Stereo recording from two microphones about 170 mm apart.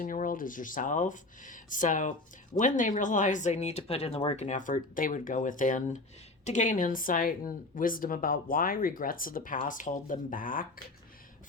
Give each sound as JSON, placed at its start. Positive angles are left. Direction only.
{"t": 0.0, "sound": "speech", "side_deg": 50}